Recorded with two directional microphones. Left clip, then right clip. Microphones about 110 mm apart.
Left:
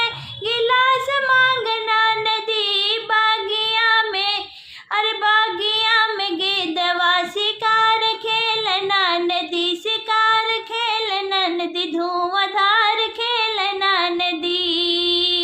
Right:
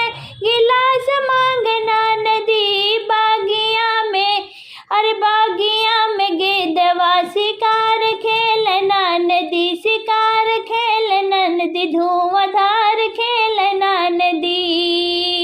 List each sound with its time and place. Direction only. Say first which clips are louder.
0.0 s child singing: right 4 dB; 40° right (ahead or behind)